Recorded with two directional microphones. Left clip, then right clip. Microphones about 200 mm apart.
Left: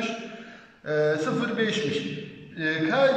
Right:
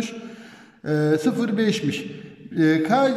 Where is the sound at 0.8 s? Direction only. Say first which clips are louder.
Right 3 dB; 40° right (ahead or behind).